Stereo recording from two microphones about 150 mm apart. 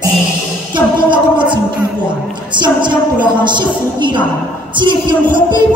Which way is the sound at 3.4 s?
30° right (ahead or behind).